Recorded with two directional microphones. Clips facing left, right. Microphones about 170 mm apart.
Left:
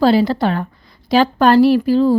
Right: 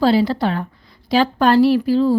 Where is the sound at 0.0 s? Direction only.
50° left (ahead or behind).